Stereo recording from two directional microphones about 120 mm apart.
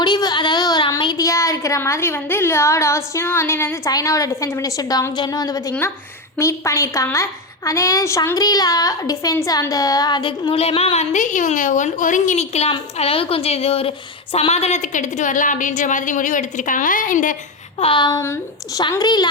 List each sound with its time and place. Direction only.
0.0 s a woman's voice: 35° left (ahead or behind)
10.5 s a woman's voice: 55° left (ahead or behind)
13.0 s a woman's voice: 50° left (ahead or behind); by 17.3 s 90° left
17.7 s a woman's voice: 45° left (ahead or behind)
18.2 s a woman's voice: 20° left (ahead or behind)
18.8 s a woman's voice: 35° left (ahead or behind)